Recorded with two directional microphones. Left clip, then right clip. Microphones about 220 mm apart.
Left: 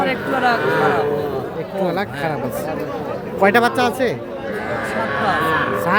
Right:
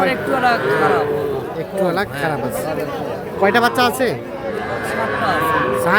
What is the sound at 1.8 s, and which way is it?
Speech, 10° right (ahead or behind).